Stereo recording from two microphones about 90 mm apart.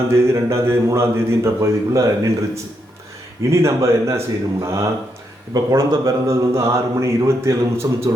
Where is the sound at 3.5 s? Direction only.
30° right (ahead or behind).